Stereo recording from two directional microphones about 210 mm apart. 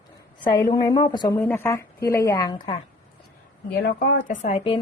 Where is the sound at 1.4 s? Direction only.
10° left (ahead or behind).